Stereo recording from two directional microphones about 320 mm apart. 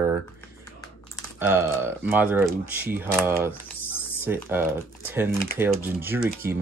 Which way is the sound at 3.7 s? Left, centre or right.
Left.